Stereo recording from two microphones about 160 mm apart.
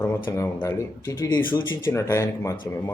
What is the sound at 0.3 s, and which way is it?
Speech, 20° left (ahead or behind).